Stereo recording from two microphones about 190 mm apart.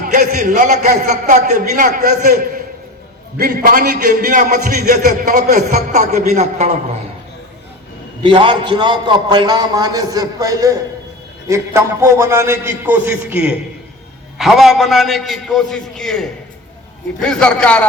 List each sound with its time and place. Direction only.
0.0 s a man's voice: 40° right (ahead or behind)
2.2 s a man's voice: 55° right (ahead or behind)
4.9 s a man's voice: 40° right (ahead or behind)
8.2 s a man's voice: 25° right (ahead or behind); by 17.8 s 5° left (ahead or behind)